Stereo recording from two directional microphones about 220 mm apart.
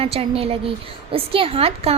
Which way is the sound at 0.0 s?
25° right (ahead or behind).